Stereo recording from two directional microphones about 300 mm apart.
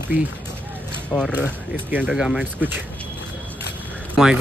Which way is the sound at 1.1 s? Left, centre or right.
Centre.